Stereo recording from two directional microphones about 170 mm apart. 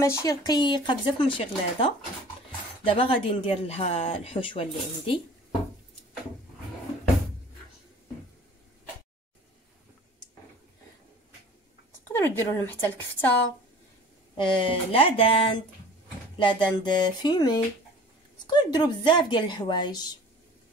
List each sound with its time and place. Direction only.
0.0 s speech: 15° left (ahead or behind)
12.1 s speech: 15° left (ahead or behind)
14.3 s speech: 30° left (ahead or behind)